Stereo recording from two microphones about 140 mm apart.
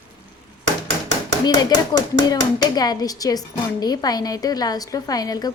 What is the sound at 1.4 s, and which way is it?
A woman's voice, 30° left (ahead or behind).